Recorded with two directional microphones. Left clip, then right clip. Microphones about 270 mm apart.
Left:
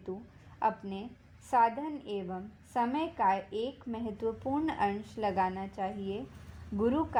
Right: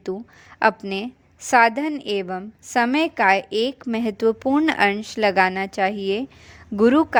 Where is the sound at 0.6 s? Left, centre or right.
Right.